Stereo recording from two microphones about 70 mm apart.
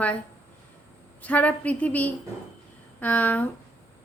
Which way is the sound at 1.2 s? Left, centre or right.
Left.